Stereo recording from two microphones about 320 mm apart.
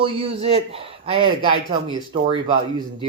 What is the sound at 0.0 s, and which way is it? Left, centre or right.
Speech, centre.